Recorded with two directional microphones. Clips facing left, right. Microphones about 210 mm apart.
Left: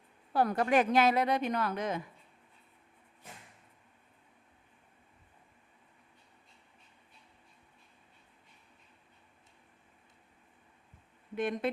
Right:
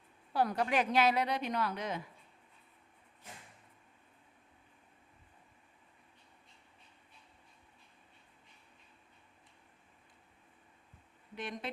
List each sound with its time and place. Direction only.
0.3 s a woman's voice: 50° left (ahead or behind)
11.3 s a woman's voice: 55° left (ahead or behind)